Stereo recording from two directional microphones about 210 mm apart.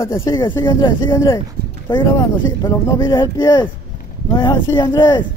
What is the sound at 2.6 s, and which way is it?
Speech, 20° left (ahead or behind).